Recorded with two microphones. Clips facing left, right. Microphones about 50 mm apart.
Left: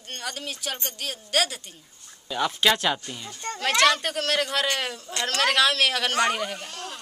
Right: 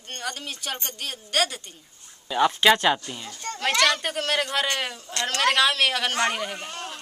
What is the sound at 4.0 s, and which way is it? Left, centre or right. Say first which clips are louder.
Speech: even; centre.